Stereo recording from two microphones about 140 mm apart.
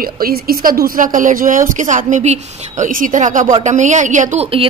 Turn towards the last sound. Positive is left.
turn(degrees=-60)  # may be behind; listen again after turning